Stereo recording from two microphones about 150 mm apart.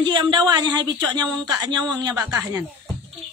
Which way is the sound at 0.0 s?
30° right (ahead or behind).